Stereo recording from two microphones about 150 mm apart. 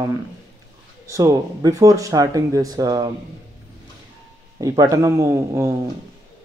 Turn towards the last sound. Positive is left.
turn(degrees=-20)  # may be behind; listen again after turning